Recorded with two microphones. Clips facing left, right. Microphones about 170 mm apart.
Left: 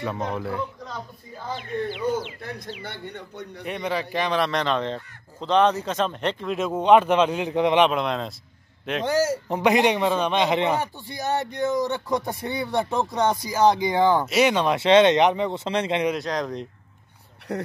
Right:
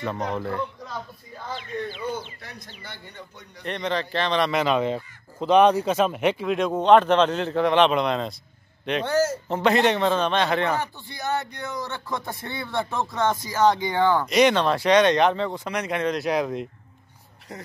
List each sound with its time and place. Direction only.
0.0 s speech: 5° left (ahead or behind)
1.6 s speech: 70° left (ahead or behind)
3.6 s speech: 10° left (ahead or behind)
4.4 s speech: 5° right (ahead or behind); by 7.9 s 15° left (ahead or behind)
7.9 s speech: centre (ahead or behind)
9.0 s speech: 10° left (ahead or behind)
14.8 s speech: 25° left (ahead or behind)
16.2 s speech: 5° right (ahead or behind)
17.5 s speech: 65° left (ahead or behind)